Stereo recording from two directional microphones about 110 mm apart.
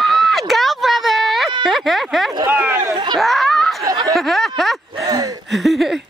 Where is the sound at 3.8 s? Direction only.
35° right (ahead or behind).